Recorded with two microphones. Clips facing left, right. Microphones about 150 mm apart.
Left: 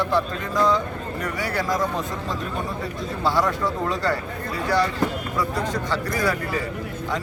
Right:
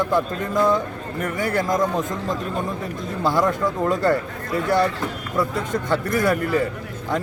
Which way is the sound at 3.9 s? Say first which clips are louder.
Right 5 dB; 50° right (ahead or behind).